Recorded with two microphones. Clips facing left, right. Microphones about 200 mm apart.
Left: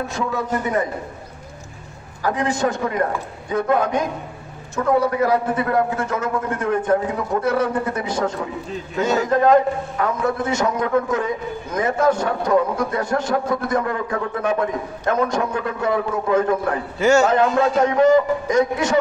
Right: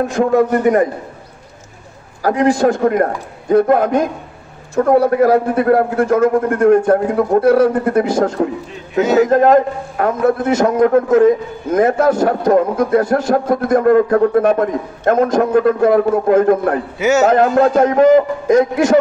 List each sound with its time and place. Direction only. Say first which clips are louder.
0.0 s a man's voice: right 11 dB; 55° right (ahead or behind)
2.3 s a man's voice: right 9 dB; 60° right (ahead or behind)
7.3 s speech: right 9 dB; 35° right (ahead or behind)
7.8 s a man's voice: right 8 dB; 55° right (ahead or behind)
17.0 s a man's voice: right 2 dB; 5° right (ahead or behind)
17.3 s a man's voice: right 6 dB; 50° right (ahead or behind)